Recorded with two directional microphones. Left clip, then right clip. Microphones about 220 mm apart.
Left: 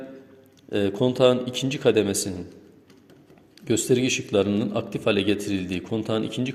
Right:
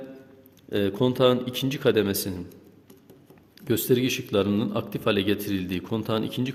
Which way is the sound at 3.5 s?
15° right (ahead or behind).